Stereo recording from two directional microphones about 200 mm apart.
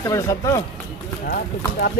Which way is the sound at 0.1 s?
15° left (ahead or behind).